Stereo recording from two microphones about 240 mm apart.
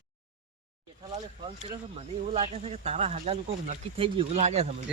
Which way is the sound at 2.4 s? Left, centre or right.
Right.